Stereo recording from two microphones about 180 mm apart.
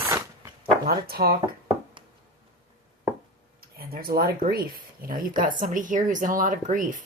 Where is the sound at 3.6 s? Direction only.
55° right (ahead or behind).